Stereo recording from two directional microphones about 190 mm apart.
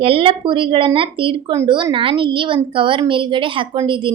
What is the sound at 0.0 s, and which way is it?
A child's voice, 30° right (ahead or behind).